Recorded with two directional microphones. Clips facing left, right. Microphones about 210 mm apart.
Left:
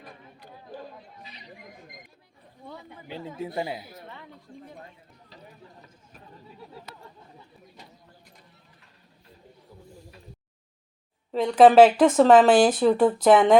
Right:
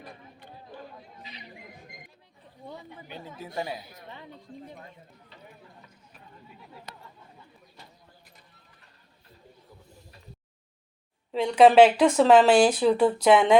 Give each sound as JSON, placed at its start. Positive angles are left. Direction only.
{"t": 3.1, "sound": "speech", "side_deg": 25}
{"t": 11.3, "sound": "speech", "side_deg": 0}
{"t": 12.8, "sound": "speech", "side_deg": 45}
{"t": 13.2, "sound": "speech", "side_deg": 0}